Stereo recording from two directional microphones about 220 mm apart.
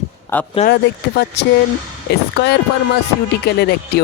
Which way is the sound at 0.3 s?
10° left (ahead or behind).